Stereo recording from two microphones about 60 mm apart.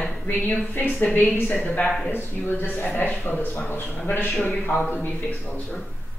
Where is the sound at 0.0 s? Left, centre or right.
Centre.